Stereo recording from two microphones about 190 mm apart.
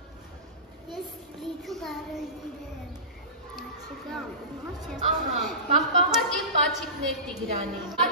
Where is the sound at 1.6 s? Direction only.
Centre (ahead or behind).